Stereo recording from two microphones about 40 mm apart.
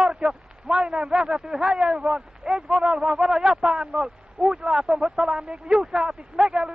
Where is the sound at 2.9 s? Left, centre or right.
Centre.